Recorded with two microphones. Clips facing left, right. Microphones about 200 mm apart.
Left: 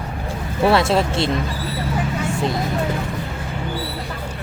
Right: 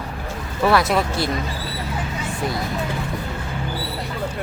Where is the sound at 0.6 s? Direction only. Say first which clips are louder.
Left 2 dB; 25° left (ahead or behind).